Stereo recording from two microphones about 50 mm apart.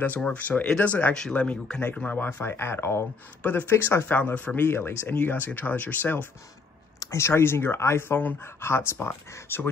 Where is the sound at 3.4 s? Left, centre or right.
Left.